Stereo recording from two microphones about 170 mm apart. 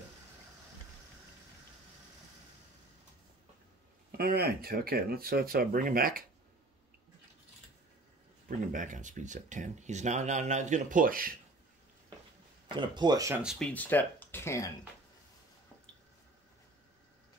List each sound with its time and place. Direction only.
4.1 s speech: 65° right (ahead or behind)
8.5 s speech: 50° right (ahead or behind)
12.7 s speech: 25° right (ahead or behind)
13.4 s speech: centre (ahead or behind)